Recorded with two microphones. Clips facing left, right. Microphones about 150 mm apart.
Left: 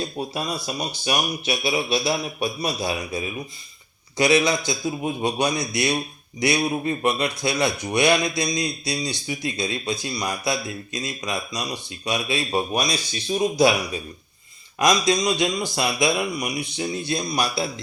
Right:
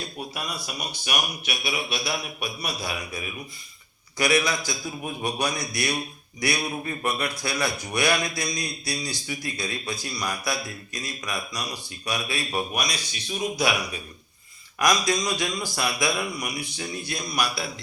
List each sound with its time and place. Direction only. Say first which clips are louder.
0.0 s speech: left 6 dB; 25° left (ahead or behind)